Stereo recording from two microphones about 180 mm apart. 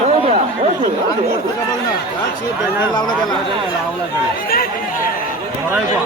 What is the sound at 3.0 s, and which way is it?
Speech, 25° left (ahead or behind).